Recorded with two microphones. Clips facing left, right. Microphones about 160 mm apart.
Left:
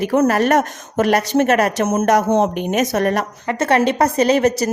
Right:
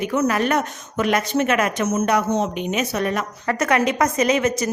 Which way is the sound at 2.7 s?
45° left (ahead or behind).